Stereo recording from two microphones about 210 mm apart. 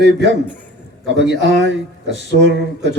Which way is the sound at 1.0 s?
60° right (ahead or behind).